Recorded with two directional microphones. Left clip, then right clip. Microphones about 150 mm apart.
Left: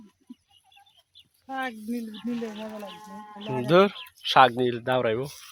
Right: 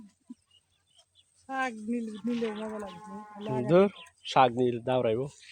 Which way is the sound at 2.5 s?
90° right.